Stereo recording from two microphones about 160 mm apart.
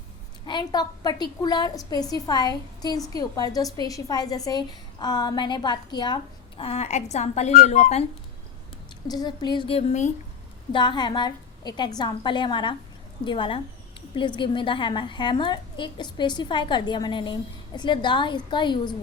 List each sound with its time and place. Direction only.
0.4 s a woman's voice: 25° left (ahead or behind)
6.6 s speech: 40° left (ahead or behind)
9.0 s a woman's voice: 25° left (ahead or behind); by 10.1 s 40° left (ahead or behind)
10.7 s a woman's voice: 30° left (ahead or behind)